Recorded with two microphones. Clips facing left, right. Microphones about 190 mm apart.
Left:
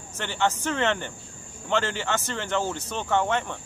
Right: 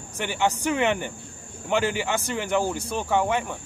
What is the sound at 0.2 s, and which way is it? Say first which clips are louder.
Speech: right 2 dB; 15° right (ahead or behind).